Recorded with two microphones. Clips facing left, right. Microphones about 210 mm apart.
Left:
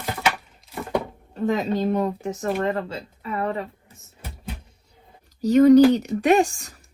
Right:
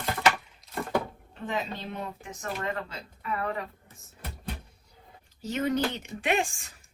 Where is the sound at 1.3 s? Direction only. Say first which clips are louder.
Left 11 dB; 40° left (ahead or behind).